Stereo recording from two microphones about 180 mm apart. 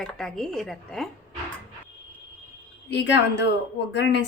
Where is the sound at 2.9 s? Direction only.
75° left (ahead or behind).